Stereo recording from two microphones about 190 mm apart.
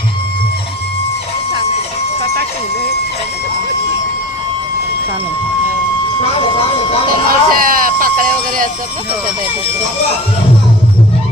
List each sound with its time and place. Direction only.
7.1 s speech: 50° right (ahead or behind)